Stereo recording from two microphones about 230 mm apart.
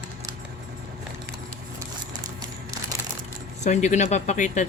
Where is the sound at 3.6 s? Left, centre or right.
Left.